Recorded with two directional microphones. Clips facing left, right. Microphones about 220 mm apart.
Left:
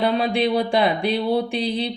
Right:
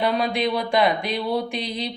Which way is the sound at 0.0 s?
30° left (ahead or behind).